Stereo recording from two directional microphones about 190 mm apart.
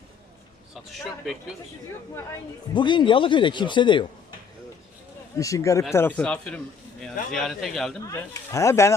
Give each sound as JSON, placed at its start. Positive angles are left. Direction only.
{"t": 0.9, "sound": "speech", "side_deg": 0}
{"t": 2.1, "sound": "speech", "side_deg": 20}
{"t": 5.4, "sound": "speech", "side_deg": 15}
{"t": 8.0, "sound": "speech", "side_deg": 15}